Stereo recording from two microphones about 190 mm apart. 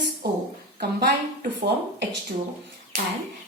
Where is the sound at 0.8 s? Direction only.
55° right (ahead or behind).